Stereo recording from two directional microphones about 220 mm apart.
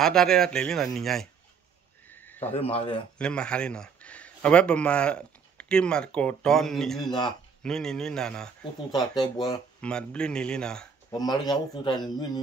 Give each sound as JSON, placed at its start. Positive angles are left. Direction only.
{"t": 0.0, "sound": "speech", "side_deg": 0}
{"t": 2.0, "sound": "a sound", "side_deg": 10}
{"t": 2.5, "sound": "a man's voice", "side_deg": 25}
{"t": 3.2, "sound": "a man's voice", "side_deg": 5}
{"t": 7.1, "sound": "a man's voice", "side_deg": 20}
{"t": 7.6, "sound": "speech", "side_deg": 5}
{"t": 8.9, "sound": "a man's voice", "side_deg": 20}
{"t": 9.8, "sound": "speech", "side_deg": 5}
{"t": 11.1, "sound": "a man's voice", "side_deg": 20}